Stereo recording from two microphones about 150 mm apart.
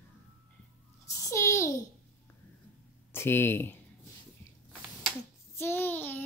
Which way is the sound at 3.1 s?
15° left (ahead or behind).